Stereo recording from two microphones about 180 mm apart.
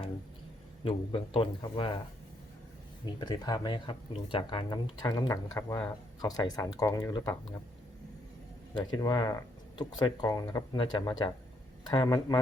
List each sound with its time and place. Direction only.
0.9 s speech: 30° left (ahead or behind)
3.1 s speech: 25° left (ahead or behind)
8.7 s speech: 25° left (ahead or behind)